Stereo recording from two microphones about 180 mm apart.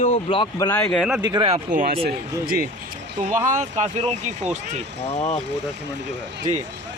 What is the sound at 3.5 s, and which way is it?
Speech, 40° right (ahead or behind).